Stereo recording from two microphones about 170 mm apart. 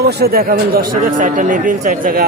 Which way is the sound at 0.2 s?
60° right (ahead or behind).